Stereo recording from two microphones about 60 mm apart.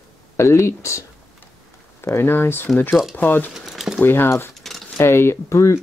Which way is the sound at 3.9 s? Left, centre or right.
Left.